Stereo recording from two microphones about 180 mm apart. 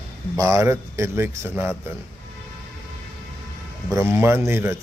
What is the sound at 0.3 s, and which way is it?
A man's voice, 20° right (ahead or behind).